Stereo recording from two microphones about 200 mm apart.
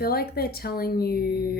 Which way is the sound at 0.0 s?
50° left (ahead or behind).